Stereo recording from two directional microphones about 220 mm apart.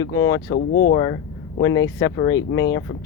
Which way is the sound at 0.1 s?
15° left (ahead or behind).